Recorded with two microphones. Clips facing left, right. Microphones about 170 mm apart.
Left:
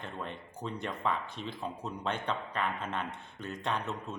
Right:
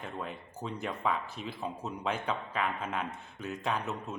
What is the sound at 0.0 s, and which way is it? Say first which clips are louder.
Speech: right 1 dB; 5° right (ahead or behind).